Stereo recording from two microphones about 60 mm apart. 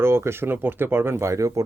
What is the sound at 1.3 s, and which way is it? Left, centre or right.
Speech, right.